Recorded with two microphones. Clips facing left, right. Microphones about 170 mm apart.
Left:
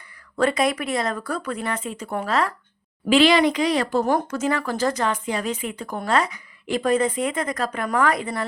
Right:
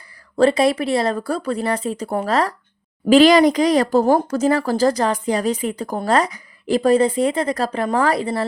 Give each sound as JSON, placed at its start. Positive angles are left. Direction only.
{"t": 0.3, "sound": "speech", "side_deg": -30}